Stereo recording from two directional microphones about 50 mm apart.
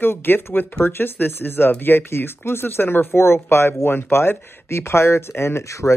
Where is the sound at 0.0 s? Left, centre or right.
Left.